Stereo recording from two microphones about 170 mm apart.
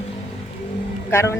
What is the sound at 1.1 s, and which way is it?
Speech, 15° left (ahead or behind).